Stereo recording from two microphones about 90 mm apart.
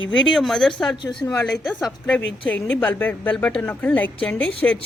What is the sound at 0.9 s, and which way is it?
Speech, 65° left (ahead or behind).